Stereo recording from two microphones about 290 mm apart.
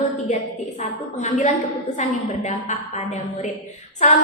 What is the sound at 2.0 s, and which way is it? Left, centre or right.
Speech, left.